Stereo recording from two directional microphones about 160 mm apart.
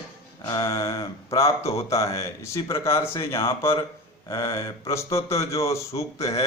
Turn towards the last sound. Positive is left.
turn(degrees=20)  # may be behind; listen again after turning